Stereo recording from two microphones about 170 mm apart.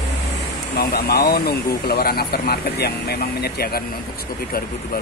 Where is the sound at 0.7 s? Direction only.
65° left (ahead or behind).